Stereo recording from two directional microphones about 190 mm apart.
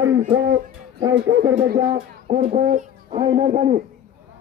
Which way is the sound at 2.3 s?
40° right (ahead or behind).